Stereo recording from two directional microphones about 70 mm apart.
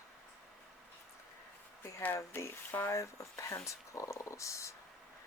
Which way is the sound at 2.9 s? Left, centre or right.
Left.